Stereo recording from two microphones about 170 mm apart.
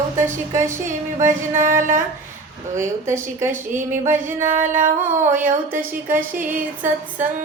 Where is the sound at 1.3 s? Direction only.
50° right (ahead or behind).